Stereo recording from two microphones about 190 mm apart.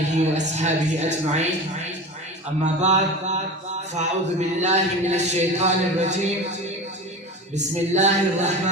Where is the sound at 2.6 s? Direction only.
40° right (ahead or behind).